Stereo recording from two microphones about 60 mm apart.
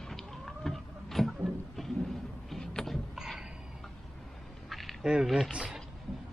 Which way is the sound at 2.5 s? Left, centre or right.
Centre.